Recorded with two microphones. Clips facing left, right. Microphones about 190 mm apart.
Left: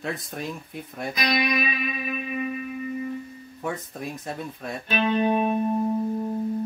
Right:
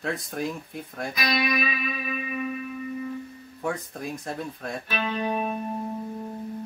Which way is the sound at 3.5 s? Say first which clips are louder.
Right 1 dB; centre (ahead or behind).